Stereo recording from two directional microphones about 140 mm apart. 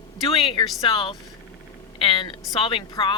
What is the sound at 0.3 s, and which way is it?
Speech, 40° left (ahead or behind).